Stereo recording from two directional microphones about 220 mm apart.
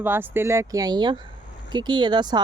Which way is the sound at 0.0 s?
10° right (ahead or behind).